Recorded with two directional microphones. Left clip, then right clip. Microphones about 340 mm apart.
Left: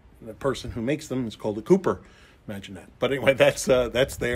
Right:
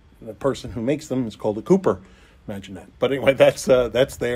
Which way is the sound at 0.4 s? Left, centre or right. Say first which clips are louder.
Right 3 dB; centre.